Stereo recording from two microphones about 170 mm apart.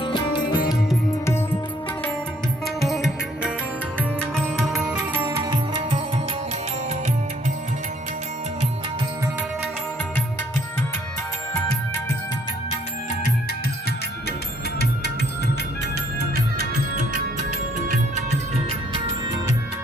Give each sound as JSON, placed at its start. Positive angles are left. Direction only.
{"t": 0.0, "sound": "music", "side_deg": 30}
{"t": 2.8, "sound": "music", "side_deg": 0}